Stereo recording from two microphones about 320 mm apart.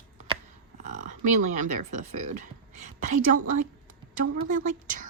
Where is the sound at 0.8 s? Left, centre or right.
Right.